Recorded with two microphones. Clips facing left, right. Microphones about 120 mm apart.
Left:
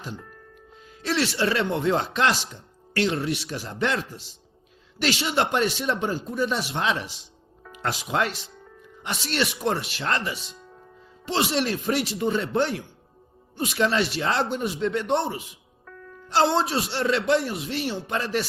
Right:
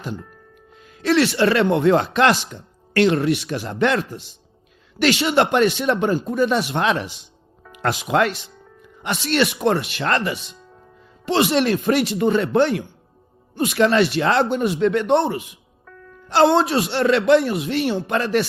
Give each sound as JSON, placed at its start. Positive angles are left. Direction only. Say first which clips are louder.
{"t": 0.8, "sound": "speech", "louder": "right 8 dB", "side_deg": -65}
{"t": 15.9, "sound": "music", "louder": "even", "side_deg": 0}
{"t": 16.3, "sound": "speech", "louder": "right 6 dB", "side_deg": -60}